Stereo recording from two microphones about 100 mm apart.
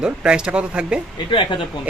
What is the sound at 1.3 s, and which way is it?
Speech, 55° left (ahead or behind).